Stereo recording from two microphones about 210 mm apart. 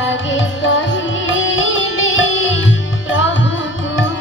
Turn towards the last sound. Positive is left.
turn(degrees=65)  # may be behind; listen again after turning